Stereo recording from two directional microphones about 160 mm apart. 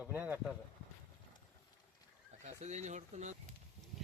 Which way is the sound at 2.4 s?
45° right (ahead or behind).